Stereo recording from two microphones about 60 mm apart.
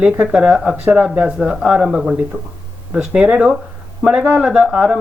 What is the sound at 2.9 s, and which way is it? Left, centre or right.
Speech, centre.